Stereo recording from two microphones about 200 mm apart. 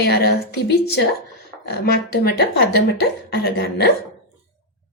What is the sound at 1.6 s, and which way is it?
A woman's voice, 55° left (ahead or behind).